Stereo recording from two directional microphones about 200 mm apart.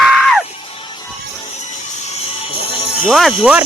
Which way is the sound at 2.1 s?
30° left (ahead or behind).